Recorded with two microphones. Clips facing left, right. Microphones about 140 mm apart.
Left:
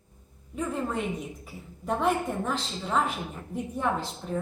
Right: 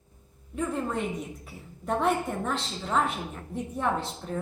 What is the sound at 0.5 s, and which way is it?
A woman's voice, centre (ahead or behind).